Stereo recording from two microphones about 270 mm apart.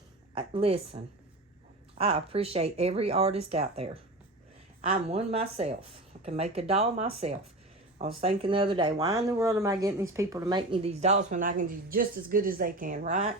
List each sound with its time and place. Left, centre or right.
0.3 s speech: centre
2.0 s speech: right